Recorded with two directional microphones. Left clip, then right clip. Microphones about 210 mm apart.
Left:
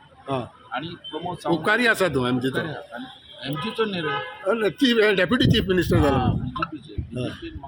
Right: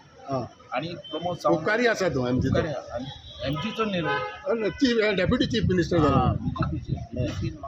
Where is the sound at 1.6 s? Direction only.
50° left (ahead or behind).